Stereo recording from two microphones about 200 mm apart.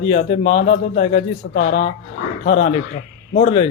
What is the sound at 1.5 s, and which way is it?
Speech, 70° left (ahead or behind).